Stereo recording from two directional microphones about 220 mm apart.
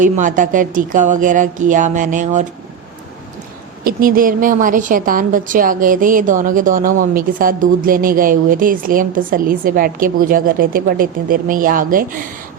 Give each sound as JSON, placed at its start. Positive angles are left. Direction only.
{"t": 0.0, "sound": "a woman's voice", "side_deg": -35}
{"t": 3.8, "sound": "a woman's voice", "side_deg": -40}